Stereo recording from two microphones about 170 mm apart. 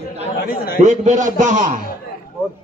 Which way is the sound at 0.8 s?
45° right (ahead or behind).